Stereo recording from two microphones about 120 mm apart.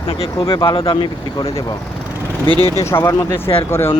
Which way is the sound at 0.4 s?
45° left (ahead or behind).